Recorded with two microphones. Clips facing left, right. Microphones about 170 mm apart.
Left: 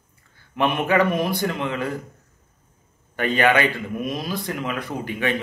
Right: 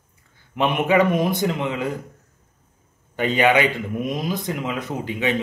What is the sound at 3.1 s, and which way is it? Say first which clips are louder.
Speech: right 1 dB; 15° right (ahead or behind).